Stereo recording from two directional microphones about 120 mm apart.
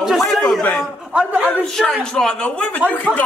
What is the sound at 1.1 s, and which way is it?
Speech, 10° right (ahead or behind).